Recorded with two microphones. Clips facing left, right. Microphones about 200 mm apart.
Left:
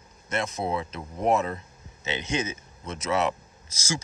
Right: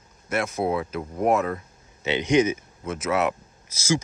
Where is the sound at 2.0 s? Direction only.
15° right (ahead or behind).